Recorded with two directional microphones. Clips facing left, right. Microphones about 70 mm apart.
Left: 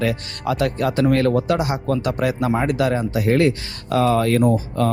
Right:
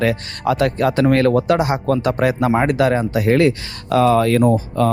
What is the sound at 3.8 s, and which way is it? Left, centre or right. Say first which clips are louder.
Speech: right 4 dB; right.